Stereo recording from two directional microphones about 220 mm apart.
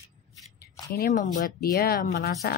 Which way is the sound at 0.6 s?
45° left (ahead or behind).